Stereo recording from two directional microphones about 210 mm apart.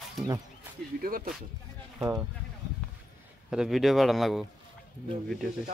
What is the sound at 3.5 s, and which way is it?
Speech, centre (ahead or behind).